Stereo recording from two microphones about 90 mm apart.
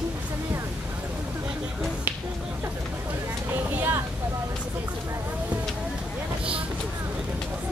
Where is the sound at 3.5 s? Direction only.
20° right (ahead or behind).